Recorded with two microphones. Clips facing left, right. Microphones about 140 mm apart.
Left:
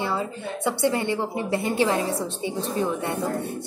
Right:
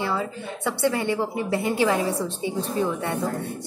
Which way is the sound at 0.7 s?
20° left (ahead or behind).